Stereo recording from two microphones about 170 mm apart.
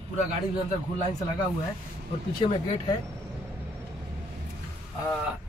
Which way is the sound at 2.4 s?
35° left (ahead or behind).